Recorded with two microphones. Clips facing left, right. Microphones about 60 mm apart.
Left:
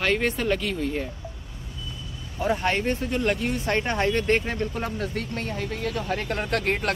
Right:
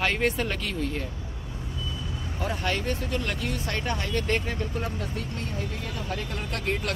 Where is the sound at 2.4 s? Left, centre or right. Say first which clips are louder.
Left 5 dB; left.